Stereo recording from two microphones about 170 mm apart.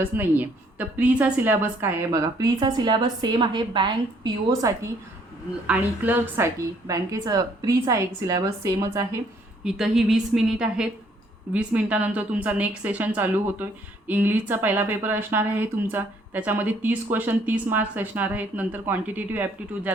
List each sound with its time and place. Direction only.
0.0 s a woman's voice: 10° right (ahead or behind)
5.6 s a woman's voice: 10° right (ahead or behind)
9.6 s a woman's voice: 5° right (ahead or behind)